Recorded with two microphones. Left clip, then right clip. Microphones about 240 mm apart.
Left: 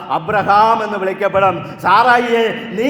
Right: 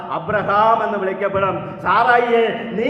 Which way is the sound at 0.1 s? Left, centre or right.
Left.